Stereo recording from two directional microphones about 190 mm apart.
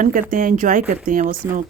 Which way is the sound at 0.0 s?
45° right (ahead or behind).